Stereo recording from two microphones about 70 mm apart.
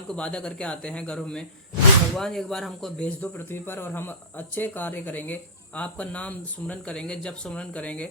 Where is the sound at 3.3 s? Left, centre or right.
Left.